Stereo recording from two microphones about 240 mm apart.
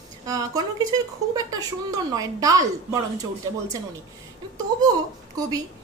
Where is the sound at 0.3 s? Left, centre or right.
Centre.